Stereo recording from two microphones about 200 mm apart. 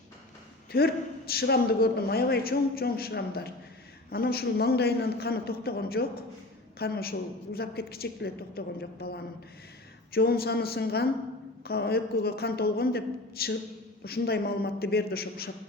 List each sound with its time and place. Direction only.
0.7 s a man's voice: 50° left (ahead or behind)